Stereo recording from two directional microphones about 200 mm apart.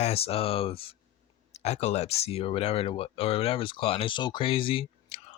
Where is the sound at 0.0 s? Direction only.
30° left (ahead or behind).